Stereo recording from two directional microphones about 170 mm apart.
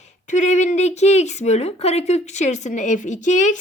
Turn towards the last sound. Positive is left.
turn(degrees=45)  # may be behind; listen again after turning